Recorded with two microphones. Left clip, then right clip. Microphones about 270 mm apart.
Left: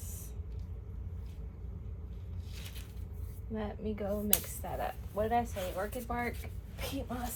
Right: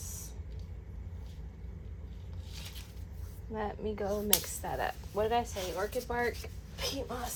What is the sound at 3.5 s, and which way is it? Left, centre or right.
Speech, right.